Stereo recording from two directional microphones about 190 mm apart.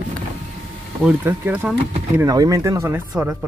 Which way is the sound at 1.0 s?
5° right (ahead or behind).